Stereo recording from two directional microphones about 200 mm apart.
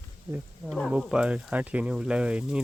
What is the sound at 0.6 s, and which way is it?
Speech, centre (ahead or behind).